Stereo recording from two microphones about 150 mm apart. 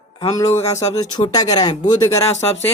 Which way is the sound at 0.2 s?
20° left (ahead or behind).